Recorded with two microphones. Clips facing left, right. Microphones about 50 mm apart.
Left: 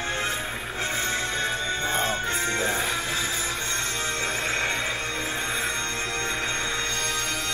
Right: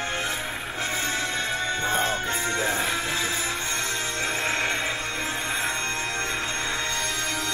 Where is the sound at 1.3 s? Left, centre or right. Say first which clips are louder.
Even; right.